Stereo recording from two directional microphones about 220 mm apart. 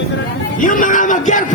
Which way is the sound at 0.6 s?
40° left (ahead or behind).